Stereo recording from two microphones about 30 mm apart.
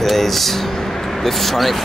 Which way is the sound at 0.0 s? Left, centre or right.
Centre.